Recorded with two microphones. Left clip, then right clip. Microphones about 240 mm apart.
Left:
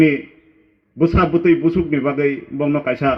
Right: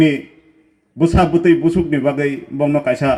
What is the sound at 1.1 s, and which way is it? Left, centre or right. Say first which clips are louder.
A man's voice: right 2 dB; right.